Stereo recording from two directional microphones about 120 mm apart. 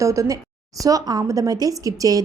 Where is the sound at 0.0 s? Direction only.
25° right (ahead or behind).